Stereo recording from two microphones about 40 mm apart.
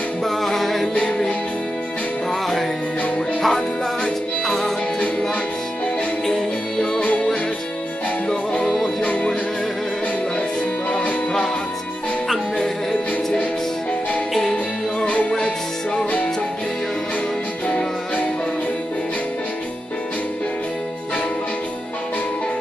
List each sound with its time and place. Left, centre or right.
0.2 s music: centre
0.9 s music: left
3.4 s music: centre
8.6 s music: centre
9.0 s music: left
15.0 s music: left